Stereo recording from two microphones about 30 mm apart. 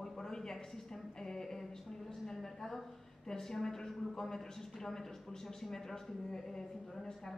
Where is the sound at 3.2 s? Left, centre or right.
Centre.